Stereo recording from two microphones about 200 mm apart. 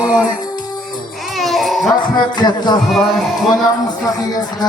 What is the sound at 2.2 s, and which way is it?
Speech, 20° left (ahead or behind).